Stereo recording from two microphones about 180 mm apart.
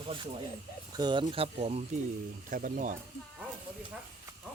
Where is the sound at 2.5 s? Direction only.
45° right (ahead or behind).